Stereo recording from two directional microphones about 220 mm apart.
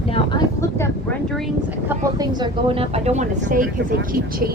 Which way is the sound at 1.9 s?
15° right (ahead or behind).